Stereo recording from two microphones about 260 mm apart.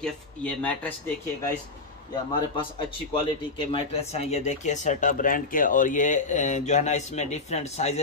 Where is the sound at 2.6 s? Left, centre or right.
Centre.